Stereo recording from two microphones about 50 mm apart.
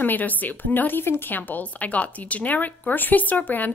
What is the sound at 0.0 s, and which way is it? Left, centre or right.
A woman's voice, left.